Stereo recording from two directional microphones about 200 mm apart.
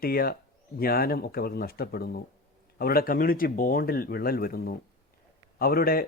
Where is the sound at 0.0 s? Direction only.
50° left (ahead or behind).